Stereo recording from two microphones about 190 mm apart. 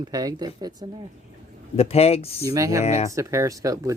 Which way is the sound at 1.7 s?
35° left (ahead or behind).